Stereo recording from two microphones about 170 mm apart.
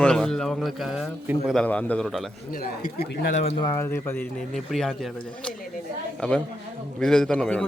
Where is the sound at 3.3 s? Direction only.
40° left (ahead or behind).